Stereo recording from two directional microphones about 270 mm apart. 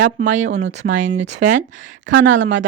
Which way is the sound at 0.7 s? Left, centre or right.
Right.